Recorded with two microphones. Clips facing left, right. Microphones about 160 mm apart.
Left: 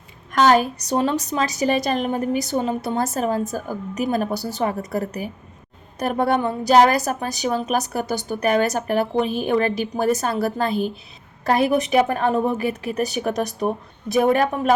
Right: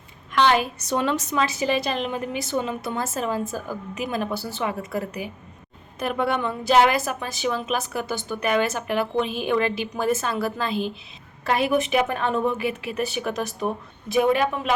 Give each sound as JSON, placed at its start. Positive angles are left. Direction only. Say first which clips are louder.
{"t": 0.3, "sound": "a woman's voice", "louder": "left 4 dB", "side_deg": 45}